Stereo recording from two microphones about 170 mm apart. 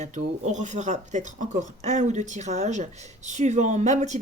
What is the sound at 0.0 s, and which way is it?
Speech, 45° right (ahead or behind).